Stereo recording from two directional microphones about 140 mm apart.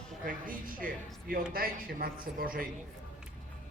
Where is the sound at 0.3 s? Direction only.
90° right.